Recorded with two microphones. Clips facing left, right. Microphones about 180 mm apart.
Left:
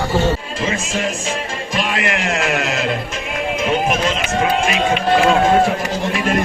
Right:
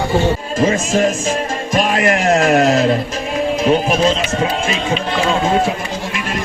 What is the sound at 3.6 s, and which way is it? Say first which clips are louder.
Speech: right 4 dB; 35° right (ahead or behind).